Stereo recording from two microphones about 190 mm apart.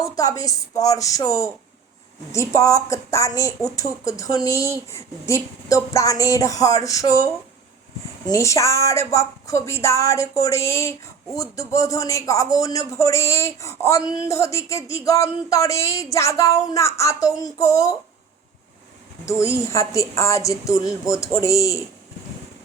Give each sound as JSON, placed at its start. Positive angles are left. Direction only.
{"t": 0.2, "sound": "speech", "side_deg": 20}
{"t": 8.3, "sound": "speech", "side_deg": 15}
{"t": 19.2, "sound": "speech", "side_deg": 15}